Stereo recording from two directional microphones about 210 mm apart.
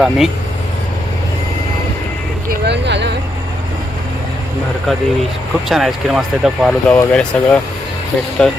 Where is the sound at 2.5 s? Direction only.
50° right (ahead or behind).